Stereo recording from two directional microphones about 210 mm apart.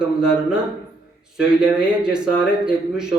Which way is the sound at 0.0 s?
5° right (ahead or behind).